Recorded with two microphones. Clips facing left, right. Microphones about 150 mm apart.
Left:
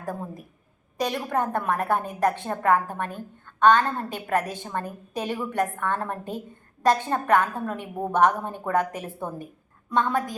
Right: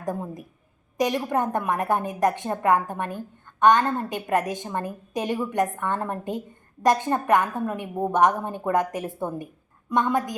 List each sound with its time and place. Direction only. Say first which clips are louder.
0.0 s a woman's voice: right 3 dB; 15° right (ahead or behind)